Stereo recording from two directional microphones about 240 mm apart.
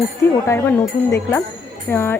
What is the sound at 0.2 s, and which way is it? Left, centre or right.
Speech, centre.